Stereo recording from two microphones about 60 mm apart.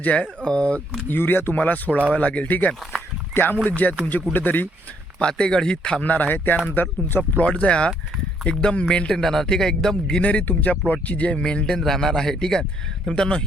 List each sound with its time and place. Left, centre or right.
0.0 s speech: left
1.0 s speech: left
5.2 s a man's voice: centre
10.2 s a man's voice: left